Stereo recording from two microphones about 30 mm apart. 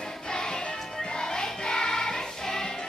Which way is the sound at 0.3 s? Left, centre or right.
Left.